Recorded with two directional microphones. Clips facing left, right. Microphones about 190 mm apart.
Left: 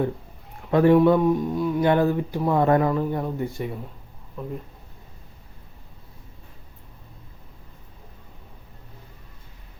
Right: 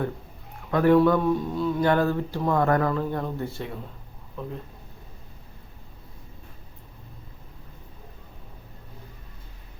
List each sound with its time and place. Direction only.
0.7 s speech: 25° left (ahead or behind); by 4.5 s 5° left (ahead or behind)